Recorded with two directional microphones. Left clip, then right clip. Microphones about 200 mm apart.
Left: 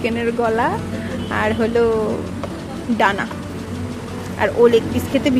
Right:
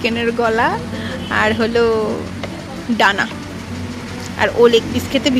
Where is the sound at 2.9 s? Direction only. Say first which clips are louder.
Right 3 dB; centre (ahead or behind).